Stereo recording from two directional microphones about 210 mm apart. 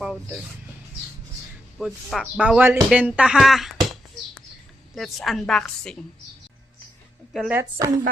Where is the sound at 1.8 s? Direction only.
Centre (ahead or behind).